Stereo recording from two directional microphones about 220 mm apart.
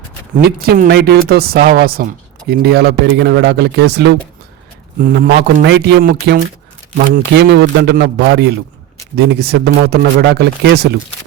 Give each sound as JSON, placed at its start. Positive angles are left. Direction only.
{"t": 0.4, "sound": "speech", "side_deg": -45}